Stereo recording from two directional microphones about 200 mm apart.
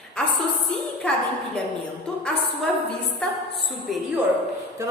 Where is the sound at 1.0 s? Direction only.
5° left (ahead or behind).